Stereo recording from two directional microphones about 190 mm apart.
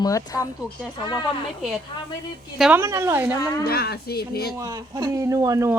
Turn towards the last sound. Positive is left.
turn(degrees=-15)  # may be behind; listen again after turning